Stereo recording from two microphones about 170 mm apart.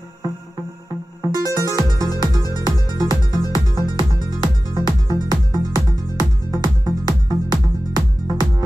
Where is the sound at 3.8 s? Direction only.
25° right (ahead or behind).